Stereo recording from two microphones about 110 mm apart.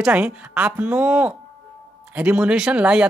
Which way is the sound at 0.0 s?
10° right (ahead or behind).